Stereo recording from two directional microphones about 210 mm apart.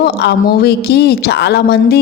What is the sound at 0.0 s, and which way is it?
A man's voice, 50° left (ahead or behind).